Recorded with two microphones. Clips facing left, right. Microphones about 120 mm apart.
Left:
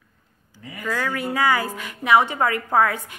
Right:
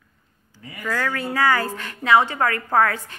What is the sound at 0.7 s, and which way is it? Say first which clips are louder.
A woman's voice: even; 15° left (ahead or behind).